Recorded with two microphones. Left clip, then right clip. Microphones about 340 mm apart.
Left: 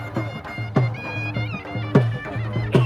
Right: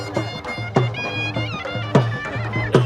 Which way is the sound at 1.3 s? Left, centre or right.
Centre.